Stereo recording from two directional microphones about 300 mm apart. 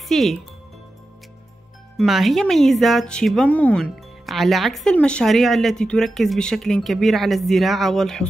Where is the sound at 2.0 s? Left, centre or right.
Centre.